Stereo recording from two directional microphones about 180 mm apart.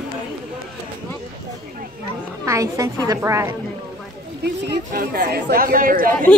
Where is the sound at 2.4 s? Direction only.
20° right (ahead or behind).